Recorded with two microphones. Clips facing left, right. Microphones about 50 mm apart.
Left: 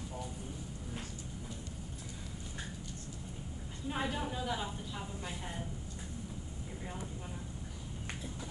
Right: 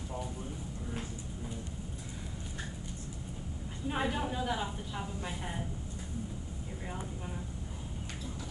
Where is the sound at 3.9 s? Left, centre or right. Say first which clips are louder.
Right 3 dB; centre.